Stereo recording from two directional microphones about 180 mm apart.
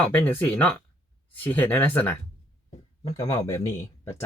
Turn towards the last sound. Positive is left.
turn(degrees=15)  # may be behind; listen again after turning